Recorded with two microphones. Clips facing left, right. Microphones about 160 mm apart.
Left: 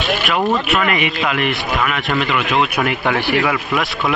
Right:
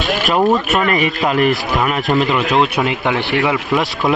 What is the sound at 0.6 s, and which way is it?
A man's voice, 40° right (ahead or behind).